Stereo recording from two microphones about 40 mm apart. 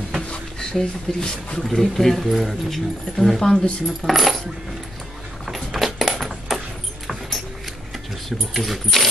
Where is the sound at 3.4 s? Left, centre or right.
Left.